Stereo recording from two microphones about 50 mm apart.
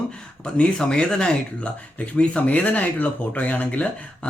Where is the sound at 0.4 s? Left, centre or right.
Left.